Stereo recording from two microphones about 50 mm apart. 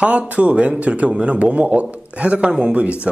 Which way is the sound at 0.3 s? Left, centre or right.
Right.